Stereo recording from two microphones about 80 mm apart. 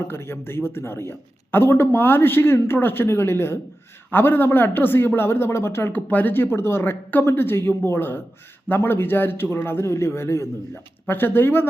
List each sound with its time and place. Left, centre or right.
0.1 s a man's voice: left